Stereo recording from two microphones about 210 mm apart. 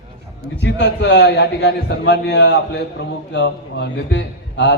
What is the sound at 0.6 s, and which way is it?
A man's voice, 55° left (ahead or behind).